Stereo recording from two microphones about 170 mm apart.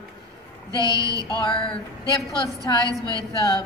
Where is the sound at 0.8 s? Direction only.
20° right (ahead or behind).